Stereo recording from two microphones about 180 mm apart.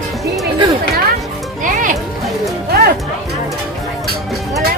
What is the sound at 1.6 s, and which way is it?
Music, 45° right (ahead or behind).